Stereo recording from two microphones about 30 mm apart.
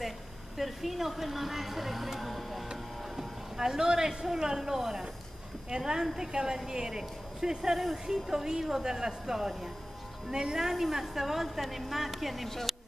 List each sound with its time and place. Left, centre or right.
0.6 s speech: centre
3.5 s a woman's voice: right
10.7 s speech: centre
12.7 s a sound: centre